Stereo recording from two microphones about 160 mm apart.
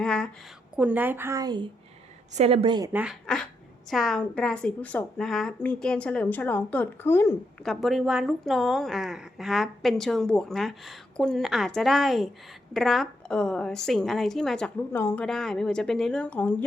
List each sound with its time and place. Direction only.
0.0 s speech: 5° left (ahead or behind)
0.8 s speech: 10° right (ahead or behind); by 1.7 s 25° right (ahead or behind)
2.3 s a woman's voice: 40° right (ahead or behind)
2.9 s a woman's voice: 5° right (ahead or behind); by 7.3 s 15° left (ahead or behind)
7.6 s a woman's voice: centre (ahead or behind)